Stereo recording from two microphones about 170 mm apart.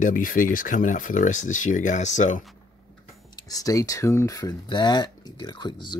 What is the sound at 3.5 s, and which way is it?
Speech, 20° left (ahead or behind).